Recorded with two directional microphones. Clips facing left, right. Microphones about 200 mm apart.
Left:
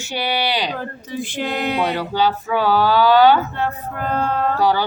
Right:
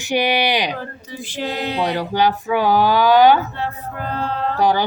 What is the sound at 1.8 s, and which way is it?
Speech, 15° right (ahead or behind).